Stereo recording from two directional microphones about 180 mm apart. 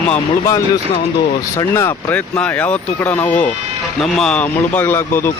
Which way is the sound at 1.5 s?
15° left (ahead or behind).